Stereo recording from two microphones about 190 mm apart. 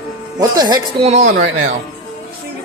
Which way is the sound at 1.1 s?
40° right (ahead or behind).